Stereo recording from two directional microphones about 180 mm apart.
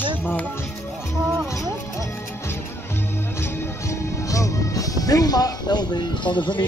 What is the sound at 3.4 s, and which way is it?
Speech, 15° left (ahead or behind).